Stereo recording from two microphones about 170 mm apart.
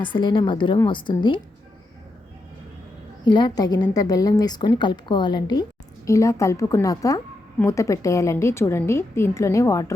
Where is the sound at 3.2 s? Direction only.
25° left (ahead or behind).